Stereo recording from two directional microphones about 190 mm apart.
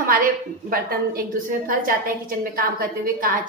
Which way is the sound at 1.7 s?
50° right (ahead or behind).